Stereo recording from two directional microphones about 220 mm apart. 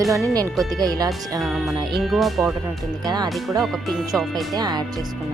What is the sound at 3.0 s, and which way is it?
Speech, 20° right (ahead or behind).